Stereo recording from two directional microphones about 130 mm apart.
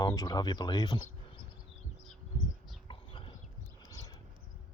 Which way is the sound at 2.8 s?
40° left (ahead or behind).